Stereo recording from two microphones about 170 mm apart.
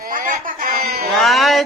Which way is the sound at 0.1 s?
50° right (ahead or behind).